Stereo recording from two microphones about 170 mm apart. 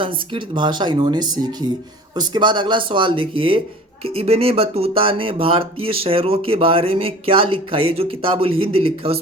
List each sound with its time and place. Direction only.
0.0 s speech: 30° right (ahead or behind)